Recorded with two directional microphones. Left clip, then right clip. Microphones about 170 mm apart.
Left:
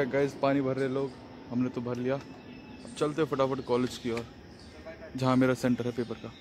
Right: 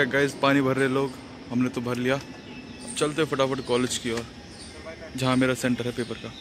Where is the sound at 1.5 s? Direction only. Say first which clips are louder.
Right 5 dB; 5° left (ahead or behind).